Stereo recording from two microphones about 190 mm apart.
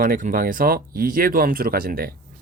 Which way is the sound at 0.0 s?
45° right (ahead or behind).